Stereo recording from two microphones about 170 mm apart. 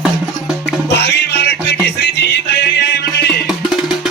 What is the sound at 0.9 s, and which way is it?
Music, 80° left.